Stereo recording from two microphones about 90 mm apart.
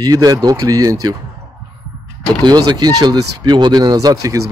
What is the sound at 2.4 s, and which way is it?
Speech, 55° right (ahead or behind).